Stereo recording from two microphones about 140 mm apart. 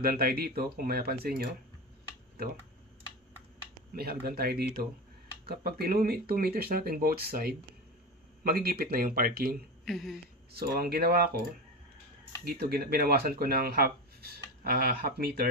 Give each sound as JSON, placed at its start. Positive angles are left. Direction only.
{"t": 0.0, "sound": "speech", "side_deg": -90}
{"t": 3.9, "sound": "speech", "side_deg": -90}
{"t": 9.8, "sound": "a sound", "side_deg": 0}
{"t": 10.5, "sound": "speech", "side_deg": -90}
{"t": 12.5, "sound": "speech", "side_deg": -90}